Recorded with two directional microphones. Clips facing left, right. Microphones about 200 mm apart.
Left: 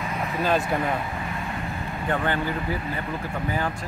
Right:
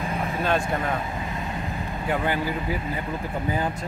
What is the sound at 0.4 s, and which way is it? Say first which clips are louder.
Speech: left 2 dB; centre (ahead or behind).